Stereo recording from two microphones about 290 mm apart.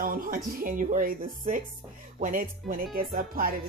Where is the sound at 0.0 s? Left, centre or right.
Right.